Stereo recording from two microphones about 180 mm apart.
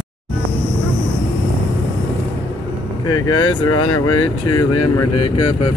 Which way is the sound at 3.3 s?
15° left (ahead or behind).